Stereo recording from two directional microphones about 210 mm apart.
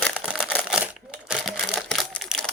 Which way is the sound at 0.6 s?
5° right (ahead or behind).